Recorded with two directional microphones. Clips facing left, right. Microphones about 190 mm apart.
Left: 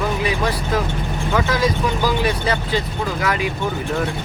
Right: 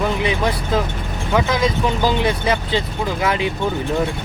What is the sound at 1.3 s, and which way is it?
Speech, 20° right (ahead or behind).